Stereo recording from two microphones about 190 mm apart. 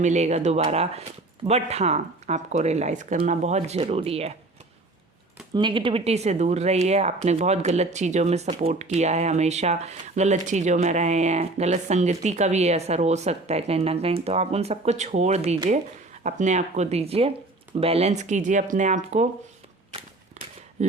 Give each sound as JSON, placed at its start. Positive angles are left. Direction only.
{"t": 0.0, "sound": "speech", "side_deg": -35}
{"t": 5.5, "sound": "speech", "side_deg": -25}
{"t": 20.4, "sound": "a sound", "side_deg": -35}